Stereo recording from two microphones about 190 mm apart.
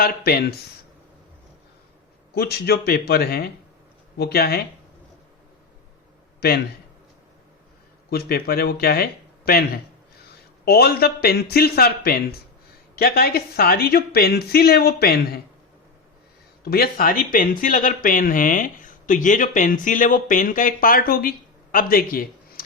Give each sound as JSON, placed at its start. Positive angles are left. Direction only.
{"t": 0.0, "sound": "a man's voice", "side_deg": 55}
{"t": 2.3, "sound": "a man's voice", "side_deg": 55}
{"t": 6.4, "sound": "a man's voice", "side_deg": 55}
{"t": 8.1, "sound": "a man's voice", "side_deg": 55}
{"t": 16.6, "sound": "speech", "side_deg": 55}